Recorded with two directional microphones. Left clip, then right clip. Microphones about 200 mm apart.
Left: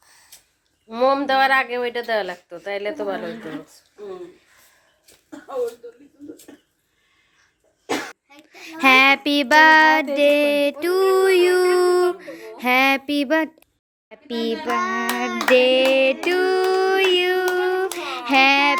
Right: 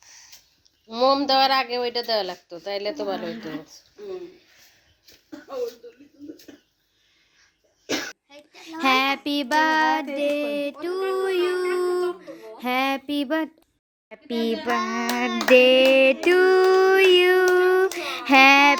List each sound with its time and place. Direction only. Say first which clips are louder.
0.9 s speech: left 1 dB; 10° right (ahead or behind)
8.5 s child singing: left 6 dB; 5° left (ahead or behind)
10.2 s a sound: left 8 dB; 15° left (ahead or behind)
11.1 s music: left 7 dB; 15° left (ahead or behind)
14.1 s speech: left 1 dB; 15° right (ahead or behind)
15.4 s child singing: right 1 dB; 20° right (ahead or behind)